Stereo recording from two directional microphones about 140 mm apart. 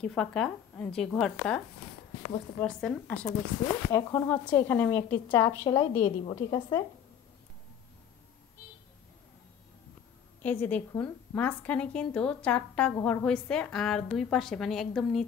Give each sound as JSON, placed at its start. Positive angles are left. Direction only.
{"t": 0.0, "sound": "speech", "side_deg": 5}
{"t": 2.6, "sound": "a woman's voice", "side_deg": 5}
{"t": 5.4, "sound": "a woman's voice", "side_deg": 25}
{"t": 5.9, "sound": "a woman's voice", "side_deg": 35}
{"t": 6.3, "sound": "a woman's voice", "side_deg": 25}
{"t": 10.4, "sound": "a woman's voice", "side_deg": 10}